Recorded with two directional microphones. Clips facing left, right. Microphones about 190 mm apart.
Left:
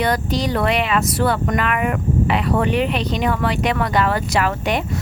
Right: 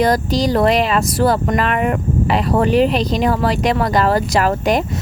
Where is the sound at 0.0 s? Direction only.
40° right (ahead or behind).